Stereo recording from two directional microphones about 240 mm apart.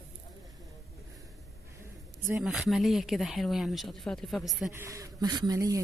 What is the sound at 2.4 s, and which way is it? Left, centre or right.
Speech, centre.